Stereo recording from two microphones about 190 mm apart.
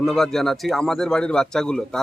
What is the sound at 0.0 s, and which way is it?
Speech, 5° left (ahead or behind).